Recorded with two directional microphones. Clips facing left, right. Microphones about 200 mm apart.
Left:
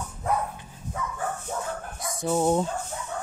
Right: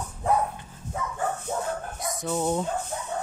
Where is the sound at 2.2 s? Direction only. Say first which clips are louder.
Left 4 dB; 35° left (ahead or behind).